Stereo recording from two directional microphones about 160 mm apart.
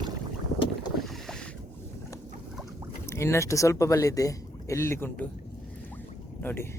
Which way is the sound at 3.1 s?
15° left (ahead or behind).